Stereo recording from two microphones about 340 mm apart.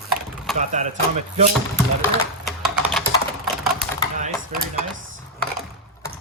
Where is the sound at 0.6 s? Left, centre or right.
Right.